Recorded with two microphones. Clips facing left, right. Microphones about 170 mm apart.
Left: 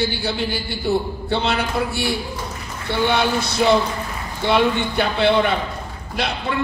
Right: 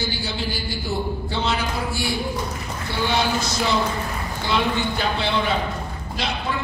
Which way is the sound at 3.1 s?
60° left (ahead or behind).